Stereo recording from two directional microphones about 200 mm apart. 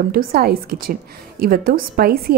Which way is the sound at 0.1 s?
50° right (ahead or behind).